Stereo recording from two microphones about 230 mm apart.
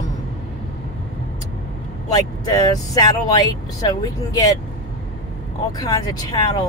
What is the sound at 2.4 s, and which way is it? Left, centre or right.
Speech, centre.